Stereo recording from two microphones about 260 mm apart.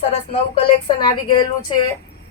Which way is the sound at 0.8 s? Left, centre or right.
Centre.